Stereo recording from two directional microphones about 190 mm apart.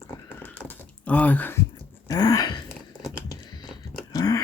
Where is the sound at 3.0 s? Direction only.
20° left (ahead or behind).